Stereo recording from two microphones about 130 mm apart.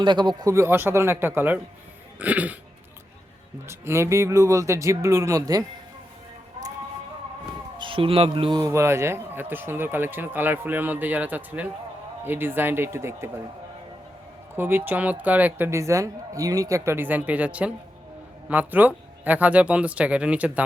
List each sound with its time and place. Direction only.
0.0 s speech: 35° right (ahead or behind)
0.4 s speech: 20° right (ahead or behind)
2.1 s dog: 10° right (ahead or behind)
3.7 s speech: 20° right (ahead or behind)
7.8 s speech: 40° right (ahead or behind)
8.5 s speech: 20° right (ahead or behind)
14.5 s speech: 15° right (ahead or behind)